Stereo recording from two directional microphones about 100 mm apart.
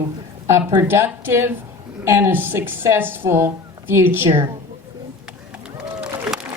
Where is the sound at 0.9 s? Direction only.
25° right (ahead or behind).